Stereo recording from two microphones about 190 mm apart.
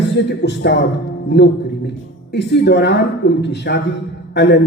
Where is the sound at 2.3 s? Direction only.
65° left (ahead or behind).